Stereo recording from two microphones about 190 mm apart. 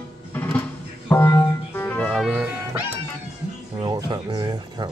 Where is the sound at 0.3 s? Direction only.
10° left (ahead or behind); by 2.8 s 5° right (ahead or behind).